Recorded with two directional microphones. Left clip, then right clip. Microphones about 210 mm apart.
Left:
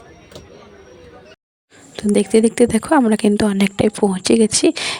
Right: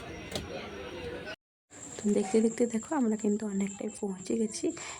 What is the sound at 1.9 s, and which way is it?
Speech, 40° left (ahead or behind).